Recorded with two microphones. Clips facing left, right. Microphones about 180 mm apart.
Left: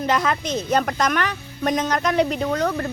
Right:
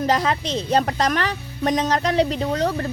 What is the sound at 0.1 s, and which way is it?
A woman's voice, 35° right (ahead or behind).